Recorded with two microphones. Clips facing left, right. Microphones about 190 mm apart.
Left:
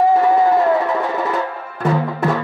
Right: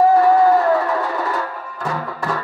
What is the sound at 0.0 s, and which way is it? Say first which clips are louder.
Music: right 1 dB; 20° left (ahead or behind).